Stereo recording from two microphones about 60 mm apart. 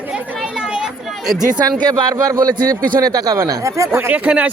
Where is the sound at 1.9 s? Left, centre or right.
Right.